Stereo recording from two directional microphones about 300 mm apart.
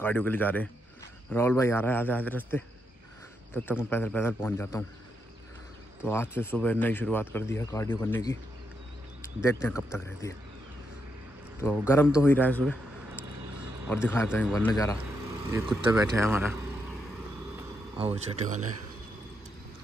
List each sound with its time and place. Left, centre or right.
0.0 s a man's voice: centre
6.0 s speech: centre
11.9 s a man's voice: centre
15.5 s speech: centre
17.9 s speech: centre